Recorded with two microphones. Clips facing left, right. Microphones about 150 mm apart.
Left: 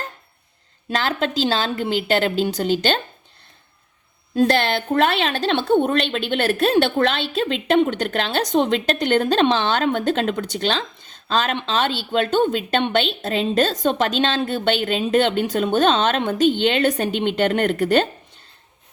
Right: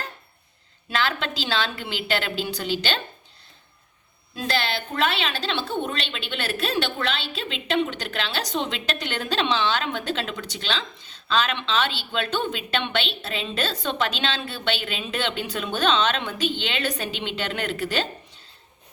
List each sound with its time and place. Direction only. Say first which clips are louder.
0.9 s a woman's voice: left 4 dB; 45° left (ahead or behind)
4.4 s a woman's voice: left 9 dB; 55° left (ahead or behind)